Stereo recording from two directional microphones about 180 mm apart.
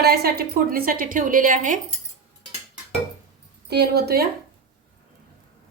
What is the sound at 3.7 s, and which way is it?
Speech, 65° right (ahead or behind).